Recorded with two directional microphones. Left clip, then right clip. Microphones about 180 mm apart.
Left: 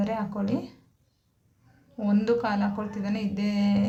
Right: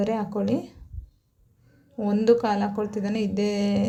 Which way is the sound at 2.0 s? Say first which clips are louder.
Right 5 dB; 30° right (ahead or behind).